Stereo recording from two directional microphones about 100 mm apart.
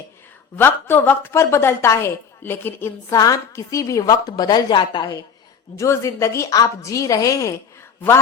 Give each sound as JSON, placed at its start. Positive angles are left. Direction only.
{"t": 0.5, "sound": "a woman's voice", "side_deg": 20}
{"t": 5.7, "sound": "a woman's voice", "side_deg": 30}